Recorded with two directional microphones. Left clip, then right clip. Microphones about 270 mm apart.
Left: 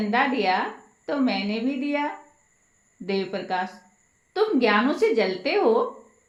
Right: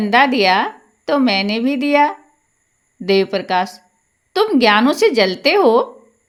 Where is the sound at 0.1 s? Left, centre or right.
Right.